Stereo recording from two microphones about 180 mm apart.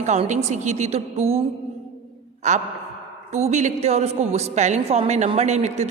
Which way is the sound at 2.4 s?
40° right (ahead or behind).